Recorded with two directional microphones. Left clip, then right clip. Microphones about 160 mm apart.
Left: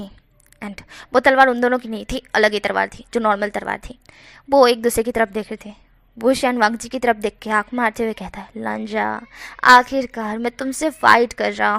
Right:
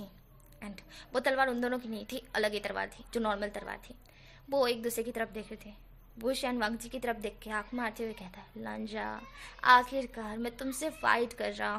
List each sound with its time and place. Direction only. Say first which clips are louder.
0.6 s a woman's voice: left 14 dB; 40° left (ahead or behind)